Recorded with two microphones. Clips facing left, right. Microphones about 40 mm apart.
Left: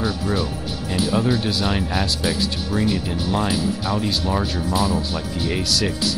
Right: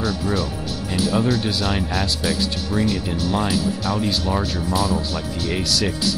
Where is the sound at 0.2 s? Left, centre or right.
Centre.